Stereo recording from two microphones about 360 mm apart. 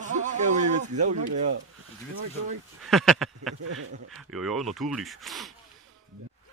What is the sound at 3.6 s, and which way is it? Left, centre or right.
Speech, right.